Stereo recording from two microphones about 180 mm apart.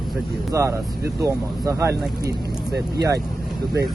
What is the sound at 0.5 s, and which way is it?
Speech, 15° right (ahead or behind).